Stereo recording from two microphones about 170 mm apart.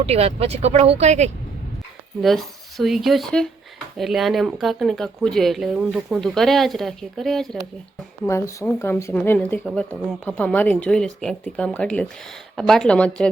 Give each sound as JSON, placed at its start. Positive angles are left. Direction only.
{"t": 0.0, "sound": "speech", "side_deg": -35}
{"t": 2.2, "sound": "speech", "side_deg": 0}
{"t": 8.3, "sound": "speech", "side_deg": 15}